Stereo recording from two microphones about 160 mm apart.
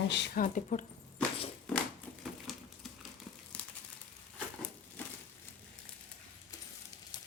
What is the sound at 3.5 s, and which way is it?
Crumpling, 10° left (ahead or behind).